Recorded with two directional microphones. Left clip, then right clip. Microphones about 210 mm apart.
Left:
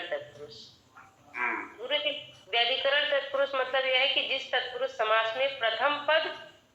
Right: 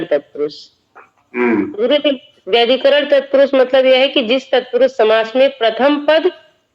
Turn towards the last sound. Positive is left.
turn(degrees=-55)  # may be behind; listen again after turning